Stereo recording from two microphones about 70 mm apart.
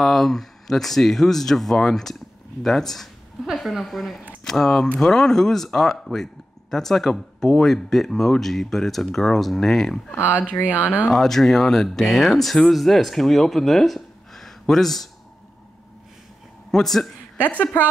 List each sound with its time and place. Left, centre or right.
0.0 s speech: centre
10.6 s speech: right
11.1 s speech: centre
16.7 s speech: centre